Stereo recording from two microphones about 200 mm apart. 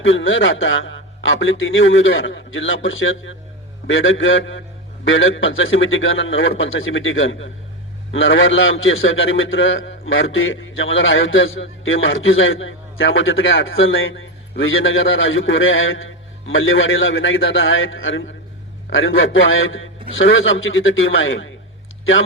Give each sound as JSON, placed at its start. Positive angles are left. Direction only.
{"t": 0.0, "sound": "a man's voice", "side_deg": 70}